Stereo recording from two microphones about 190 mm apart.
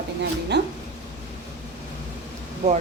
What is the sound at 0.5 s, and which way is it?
Speech, 60° right (ahead or behind).